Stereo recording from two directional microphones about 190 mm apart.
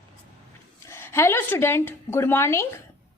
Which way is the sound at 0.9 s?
15° left (ahead or behind).